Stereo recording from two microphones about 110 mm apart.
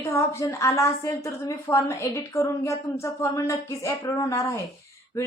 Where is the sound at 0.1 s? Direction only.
25° left (ahead or behind).